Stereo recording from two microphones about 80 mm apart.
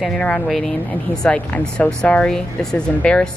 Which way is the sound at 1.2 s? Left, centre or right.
Centre.